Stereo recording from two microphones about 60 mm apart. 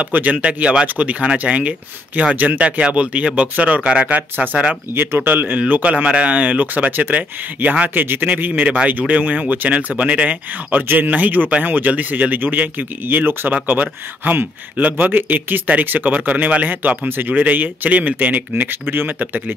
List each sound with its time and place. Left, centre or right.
0.0 s speech: right
4.9 s speech: right
7.9 s speech: right